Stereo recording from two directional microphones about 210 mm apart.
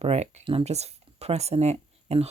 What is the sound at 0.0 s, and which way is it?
Speech, 30° right (ahead or behind).